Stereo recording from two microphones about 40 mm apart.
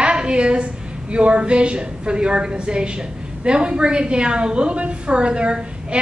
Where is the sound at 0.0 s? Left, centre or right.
Right.